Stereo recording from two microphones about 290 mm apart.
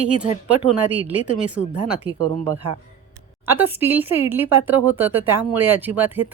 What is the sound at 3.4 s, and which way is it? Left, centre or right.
Speech, centre.